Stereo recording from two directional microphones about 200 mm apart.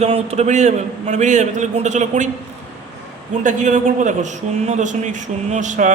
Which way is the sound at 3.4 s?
40° right (ahead or behind).